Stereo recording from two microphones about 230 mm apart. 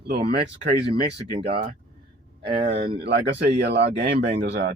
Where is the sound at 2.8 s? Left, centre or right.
Right.